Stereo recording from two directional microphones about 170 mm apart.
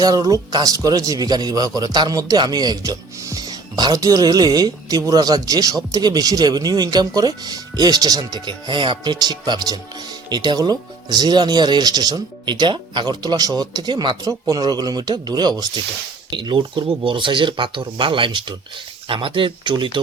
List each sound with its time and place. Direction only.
0.0 s speech: 20° right (ahead or behind)